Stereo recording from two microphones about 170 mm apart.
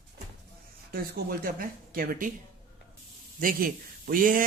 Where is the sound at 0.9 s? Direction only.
60° right (ahead or behind).